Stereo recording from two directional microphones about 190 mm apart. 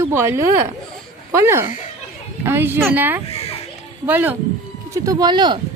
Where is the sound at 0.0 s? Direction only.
15° right (ahead or behind).